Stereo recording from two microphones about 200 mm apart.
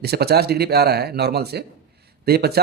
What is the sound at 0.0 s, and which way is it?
Speech, 55° right (ahead or behind).